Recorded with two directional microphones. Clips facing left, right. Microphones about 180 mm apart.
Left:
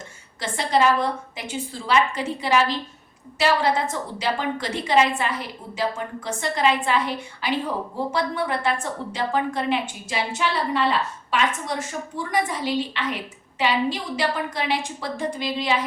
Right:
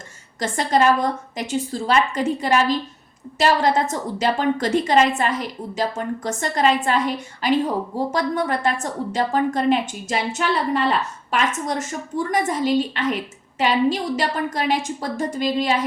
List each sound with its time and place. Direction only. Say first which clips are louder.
0.3 s a woman's voice: right 2 dB; 45° right (ahead or behind)